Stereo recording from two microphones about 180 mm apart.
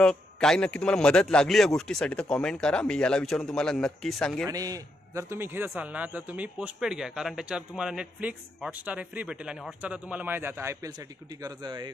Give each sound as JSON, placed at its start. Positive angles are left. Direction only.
{"t": 0.0, "sound": "speech", "side_deg": 5}
{"t": 4.5, "sound": "a man's voice", "side_deg": -20}